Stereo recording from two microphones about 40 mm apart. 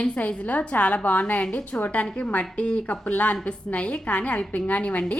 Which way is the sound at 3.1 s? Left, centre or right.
Left.